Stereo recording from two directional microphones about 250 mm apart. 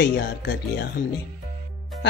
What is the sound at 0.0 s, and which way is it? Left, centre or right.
Speech, left.